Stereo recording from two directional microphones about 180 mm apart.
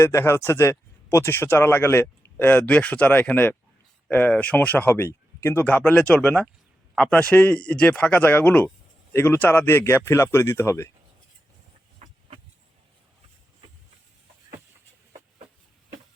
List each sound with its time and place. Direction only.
0.0 s speech: 15° left (ahead or behind)